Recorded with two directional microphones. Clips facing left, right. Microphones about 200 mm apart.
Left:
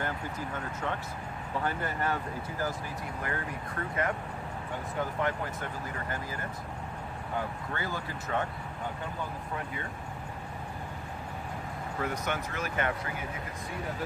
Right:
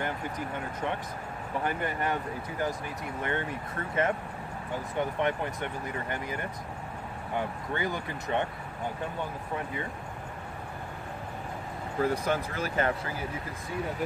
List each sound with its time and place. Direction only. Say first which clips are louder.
1.6 s speech: right 1 dB; 20° right (ahead or behind)
3.2 s speech: right 5 dB; 25° right (ahead or behind)
5.2 s speech: right 3 dB; 20° right (ahead or behind)
7.7 s speech: right 5 dB; 20° right (ahead or behind)
12.0 s speech: right 6 dB; 30° right (ahead or behind)